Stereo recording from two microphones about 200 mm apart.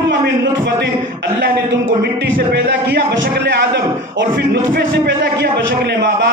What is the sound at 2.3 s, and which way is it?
Music, 50° right (ahead or behind).